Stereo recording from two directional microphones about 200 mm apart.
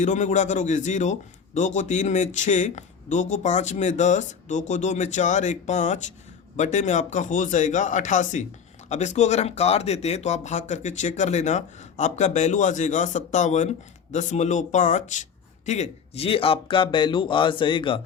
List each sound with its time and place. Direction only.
0.0 s speech: 40° left (ahead or behind)